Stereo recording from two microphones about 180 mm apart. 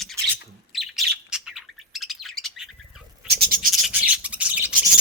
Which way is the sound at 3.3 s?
60° right (ahead or behind).